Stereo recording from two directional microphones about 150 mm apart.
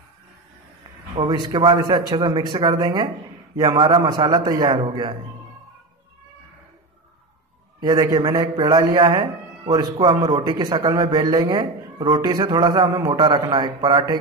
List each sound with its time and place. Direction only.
1.1 s a man's voice: 30° right (ahead or behind)
7.8 s a man's voice: 25° right (ahead or behind)
13.2 s a man's voice: 35° right (ahead or behind)